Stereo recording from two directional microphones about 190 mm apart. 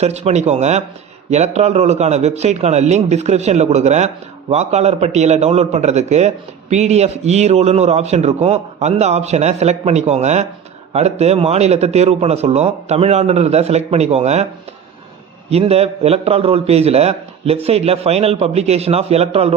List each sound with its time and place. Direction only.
0.0 s a man's voice: 35° right (ahead or behind)
15.4 s a man's voice: 35° right (ahead or behind)